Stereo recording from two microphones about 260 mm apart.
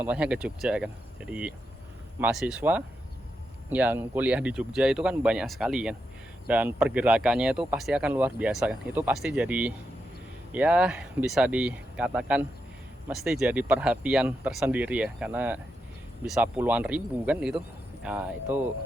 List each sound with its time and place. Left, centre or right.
0.0 s speech: centre